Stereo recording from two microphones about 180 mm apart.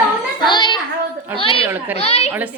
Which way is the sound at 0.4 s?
25° left (ahead or behind).